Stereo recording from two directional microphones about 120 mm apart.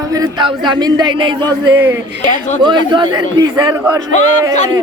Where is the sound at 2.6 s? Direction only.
40° right (ahead or behind).